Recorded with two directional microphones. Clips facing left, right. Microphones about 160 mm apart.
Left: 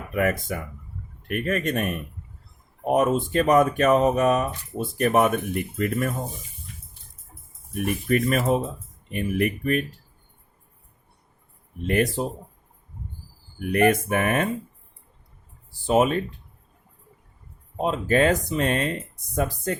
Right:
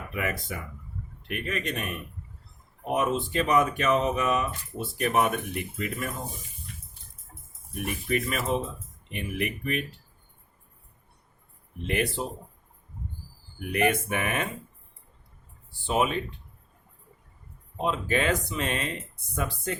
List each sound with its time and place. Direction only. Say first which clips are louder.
0.1 s speech: left 8 dB; 50° left (ahead or behind)
7.9 s speech: left 6 dB; 50° left (ahead or behind)
11.9 s speech: left 6 dB; 40° left (ahead or behind)
13.6 s speech: left 6 dB; 45° left (ahead or behind)
15.7 s speech: left 6 dB; 40° left (ahead or behind)
17.8 s speech: left 6 dB; 40° left (ahead or behind)